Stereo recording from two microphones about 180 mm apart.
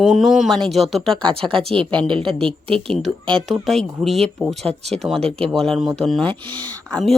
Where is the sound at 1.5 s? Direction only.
30° right (ahead or behind).